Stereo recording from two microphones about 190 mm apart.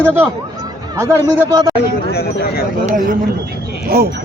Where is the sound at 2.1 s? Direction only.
55° left (ahead or behind).